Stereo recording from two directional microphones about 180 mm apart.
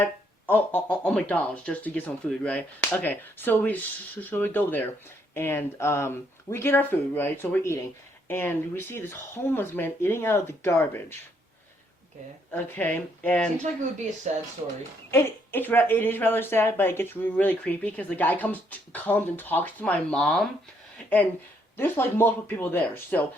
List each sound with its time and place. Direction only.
0.4 s speech: 10° left (ahead or behind)
12.5 s speech: 10° left (ahead or behind)
14.3 s speech: 40° right (ahead or behind)
15.1 s speech: 10° left (ahead or behind)
21.8 s speech: 10° left (ahead or behind)